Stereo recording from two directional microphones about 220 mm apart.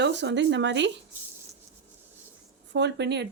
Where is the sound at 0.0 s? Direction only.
55° right (ahead or behind).